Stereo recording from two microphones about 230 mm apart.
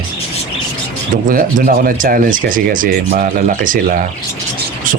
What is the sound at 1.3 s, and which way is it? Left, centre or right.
Speech, right.